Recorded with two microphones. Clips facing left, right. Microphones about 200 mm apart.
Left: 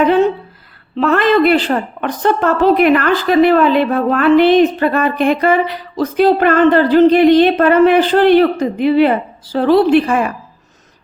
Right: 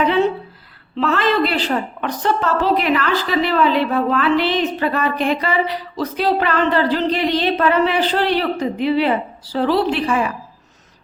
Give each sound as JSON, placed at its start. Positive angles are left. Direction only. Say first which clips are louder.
{"t": 0.9, "sound": "a woman's voice", "louder": "left 6 dB", "side_deg": 55}